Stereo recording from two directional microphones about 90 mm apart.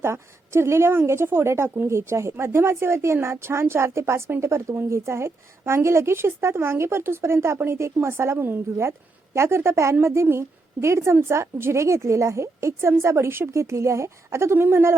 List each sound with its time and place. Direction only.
0.0 s a woman's voice: 30° right (ahead or behind)